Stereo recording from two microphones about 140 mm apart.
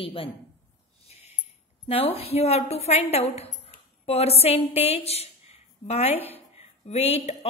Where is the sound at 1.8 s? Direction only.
40° left (ahead or behind).